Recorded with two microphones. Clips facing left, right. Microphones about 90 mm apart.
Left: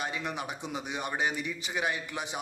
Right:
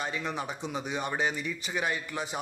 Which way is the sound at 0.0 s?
15° left (ahead or behind).